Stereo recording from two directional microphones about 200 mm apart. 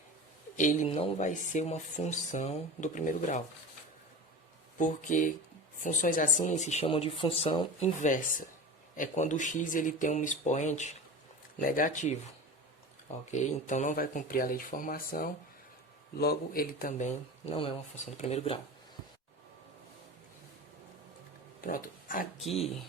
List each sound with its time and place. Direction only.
0.5 s speech: 40° left (ahead or behind)
4.8 s speech: 40° left (ahead or behind)
7.9 s speech: 40° left (ahead or behind)
13.3 s speech: 35° left (ahead or behind)
21.6 s speech: 45° left (ahead or behind)
22.5 s speech: centre (ahead or behind)